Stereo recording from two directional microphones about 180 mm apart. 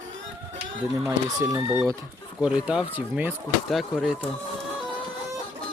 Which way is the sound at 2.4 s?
5° right (ahead or behind).